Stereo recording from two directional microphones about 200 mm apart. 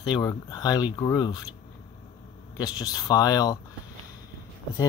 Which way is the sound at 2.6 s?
20° left (ahead or behind).